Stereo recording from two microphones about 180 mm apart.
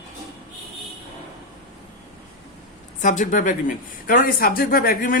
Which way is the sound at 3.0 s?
45° left (ahead or behind).